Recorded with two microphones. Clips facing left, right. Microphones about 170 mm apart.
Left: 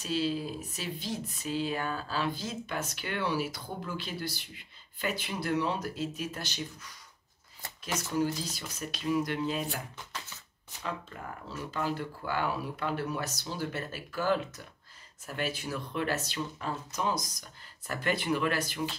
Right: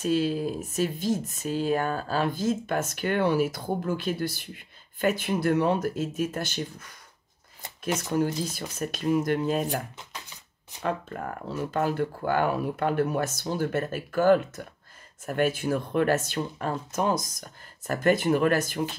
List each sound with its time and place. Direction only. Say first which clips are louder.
0.0 s speech: right 6 dB; 50° right (ahead or behind)
8.1 s speech: right 3 dB; 50° right (ahead or behind)
9.9 s a sound: even; 15° right (ahead or behind)
10.8 s speech: right 8 dB; 55° right (ahead or behind)